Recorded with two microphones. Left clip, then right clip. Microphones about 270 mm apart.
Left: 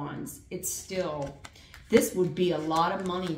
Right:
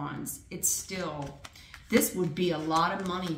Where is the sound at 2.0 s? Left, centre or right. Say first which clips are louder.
Left 3 dB; right.